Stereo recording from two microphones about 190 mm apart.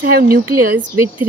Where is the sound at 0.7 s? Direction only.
10° right (ahead or behind).